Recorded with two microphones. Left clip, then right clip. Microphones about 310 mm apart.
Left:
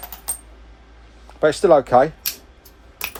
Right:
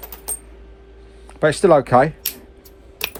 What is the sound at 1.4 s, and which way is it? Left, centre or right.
Speech, right.